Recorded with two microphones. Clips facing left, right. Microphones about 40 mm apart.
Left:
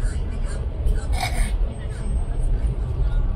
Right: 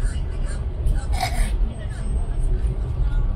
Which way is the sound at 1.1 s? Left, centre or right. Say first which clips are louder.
Right 2 dB; left.